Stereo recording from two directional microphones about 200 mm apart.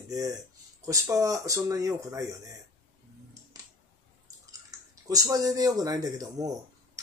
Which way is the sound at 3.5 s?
20° right (ahead or behind).